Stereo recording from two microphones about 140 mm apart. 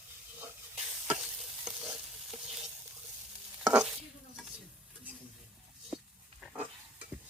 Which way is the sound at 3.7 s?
5° right (ahead or behind).